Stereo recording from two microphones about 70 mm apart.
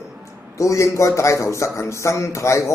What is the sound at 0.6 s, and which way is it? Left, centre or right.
Speech, left.